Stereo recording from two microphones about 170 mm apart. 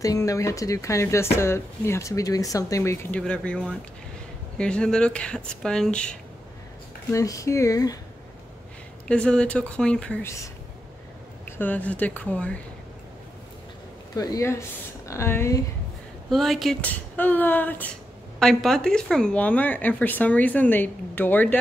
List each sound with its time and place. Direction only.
0.0 s speech: 20° left (ahead or behind)
7.1 s speech: 20° left (ahead or behind)
9.0 s speech: 5° left (ahead or behind)
11.4 s speech: 10° left (ahead or behind)
14.1 s speech: 20° left (ahead or behind)
16.3 s speech: centre (ahead or behind)
17.2 s speech: 10° left (ahead or behind)